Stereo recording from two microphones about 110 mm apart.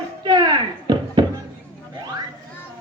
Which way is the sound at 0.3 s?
40° right (ahead or behind).